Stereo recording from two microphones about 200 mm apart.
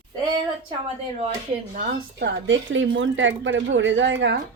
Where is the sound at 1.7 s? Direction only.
50° right (ahead or behind).